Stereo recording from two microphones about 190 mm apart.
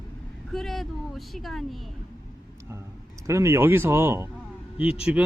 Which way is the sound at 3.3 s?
15° right (ahead or behind).